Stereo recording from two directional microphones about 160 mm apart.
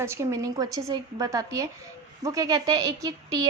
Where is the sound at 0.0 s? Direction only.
15° right (ahead or behind).